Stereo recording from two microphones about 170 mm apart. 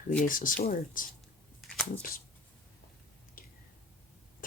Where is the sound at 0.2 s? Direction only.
50° left (ahead or behind).